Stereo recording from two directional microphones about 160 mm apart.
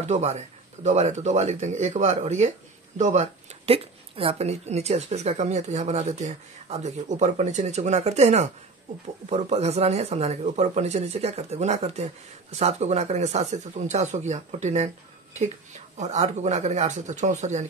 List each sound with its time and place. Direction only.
0.1 s speech: 45° right (ahead or behind)
16.0 s speech: 45° right (ahead or behind)